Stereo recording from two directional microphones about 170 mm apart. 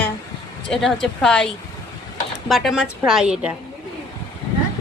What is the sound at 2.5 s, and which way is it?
A woman's voice, centre (ahead or behind).